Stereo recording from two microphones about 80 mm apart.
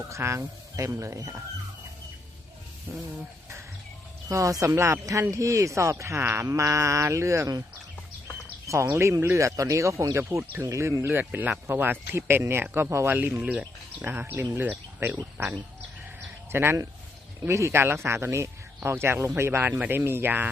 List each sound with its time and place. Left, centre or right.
0.1 s speech: right
2.9 s speech: right
4.3 s speech: right
8.6 s speech: right
11.2 s speech: right
13.1 s speech: centre
14.2 s speech: right
14.6 s speech: right